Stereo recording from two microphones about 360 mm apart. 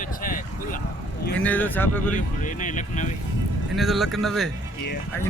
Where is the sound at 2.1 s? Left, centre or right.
Left.